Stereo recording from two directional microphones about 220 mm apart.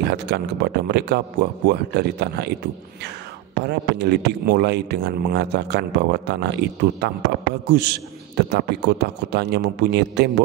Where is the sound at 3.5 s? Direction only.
50° right (ahead or behind).